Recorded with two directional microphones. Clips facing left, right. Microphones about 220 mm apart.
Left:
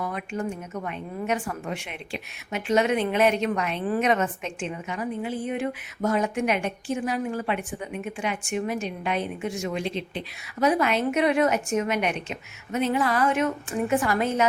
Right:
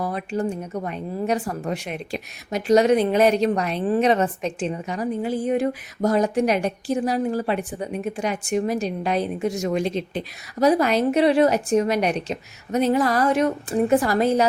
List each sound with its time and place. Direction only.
0.0 s speech: 35° right (ahead or behind)